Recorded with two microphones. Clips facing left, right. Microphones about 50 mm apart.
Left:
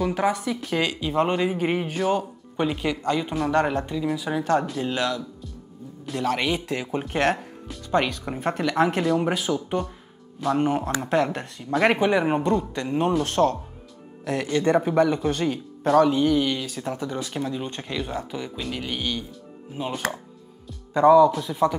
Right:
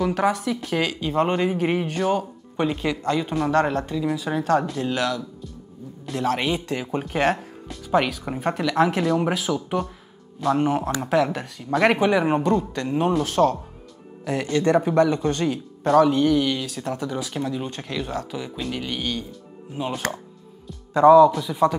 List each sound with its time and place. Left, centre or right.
0.0 s speech: centre
3.5 s speech: centre
3.9 s speech: centre
4.9 s speech: centre
6.0 s speech: centre